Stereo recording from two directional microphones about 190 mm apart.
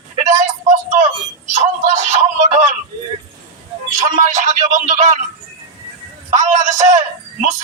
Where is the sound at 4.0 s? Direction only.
40° right (ahead or behind).